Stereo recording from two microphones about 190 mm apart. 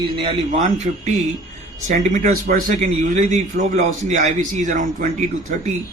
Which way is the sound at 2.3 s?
55° right (ahead or behind).